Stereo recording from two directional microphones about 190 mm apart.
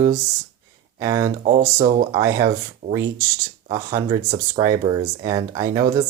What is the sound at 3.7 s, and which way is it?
Speech, 20° right (ahead or behind).